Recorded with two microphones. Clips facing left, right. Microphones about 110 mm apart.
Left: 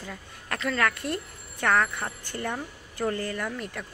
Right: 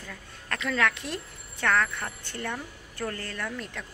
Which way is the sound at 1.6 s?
15° left (ahead or behind).